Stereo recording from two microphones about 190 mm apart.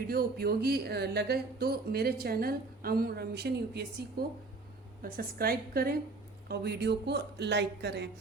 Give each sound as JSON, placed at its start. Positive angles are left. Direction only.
{"t": 0.1, "sound": "a woman's voice", "side_deg": -55}